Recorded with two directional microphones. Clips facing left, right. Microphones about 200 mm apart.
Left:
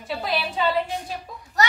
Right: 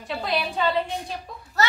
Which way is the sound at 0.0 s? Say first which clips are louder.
Even; centre (ahead or behind).